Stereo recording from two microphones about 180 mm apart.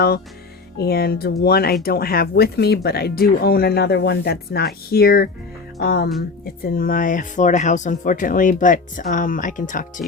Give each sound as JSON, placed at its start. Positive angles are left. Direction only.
{"t": 0.8, "sound": "speech", "side_deg": 60}